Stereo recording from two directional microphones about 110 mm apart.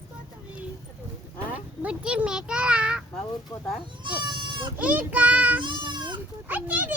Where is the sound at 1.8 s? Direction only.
10° right (ahead or behind).